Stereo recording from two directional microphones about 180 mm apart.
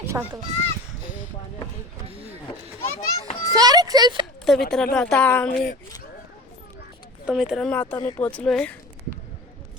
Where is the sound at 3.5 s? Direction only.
20° right (ahead or behind).